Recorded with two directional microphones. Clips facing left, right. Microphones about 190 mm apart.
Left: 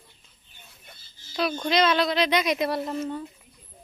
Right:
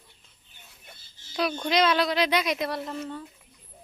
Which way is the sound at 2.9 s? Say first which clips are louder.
Left 5 dB; 20° left (ahead or behind).